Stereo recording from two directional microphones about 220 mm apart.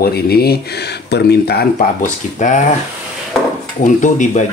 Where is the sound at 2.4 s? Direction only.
35° left (ahead or behind).